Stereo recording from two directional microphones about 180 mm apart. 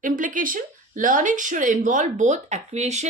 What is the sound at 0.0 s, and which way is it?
Speech, 45° right (ahead or behind).